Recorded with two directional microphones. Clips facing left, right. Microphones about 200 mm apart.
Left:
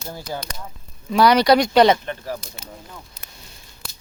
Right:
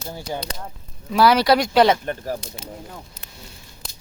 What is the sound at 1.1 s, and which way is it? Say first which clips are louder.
Speech: left 1 dB; 5° right (ahead or behind).